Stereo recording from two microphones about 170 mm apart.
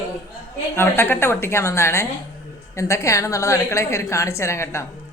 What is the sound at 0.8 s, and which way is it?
A woman's voice, 15° left (ahead or behind).